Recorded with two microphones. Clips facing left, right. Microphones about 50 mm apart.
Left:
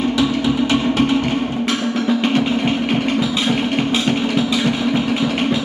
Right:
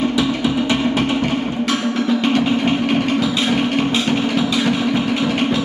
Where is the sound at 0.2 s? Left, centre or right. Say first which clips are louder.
Left 1 dB; centre.